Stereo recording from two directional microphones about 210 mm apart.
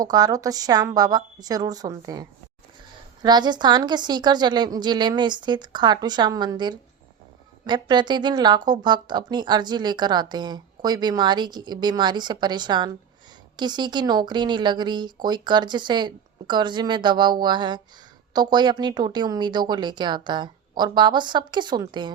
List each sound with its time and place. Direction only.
0.0 s a woman's voice: 15° right (ahead or behind)